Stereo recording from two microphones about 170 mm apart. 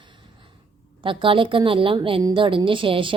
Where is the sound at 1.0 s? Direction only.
30° right (ahead or behind).